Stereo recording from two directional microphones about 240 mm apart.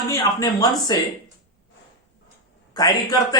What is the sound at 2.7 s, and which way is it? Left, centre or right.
Speech, centre.